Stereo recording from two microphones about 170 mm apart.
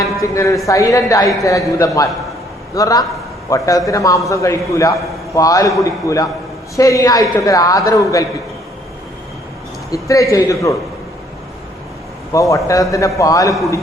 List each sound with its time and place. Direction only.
0.0 s a man's voice: 20° left (ahead or behind)
9.9 s a man's voice: 20° left (ahead or behind)
12.3 s a man's voice: 20° left (ahead or behind)